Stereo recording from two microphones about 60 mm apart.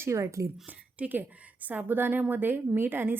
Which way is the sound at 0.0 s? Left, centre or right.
Right.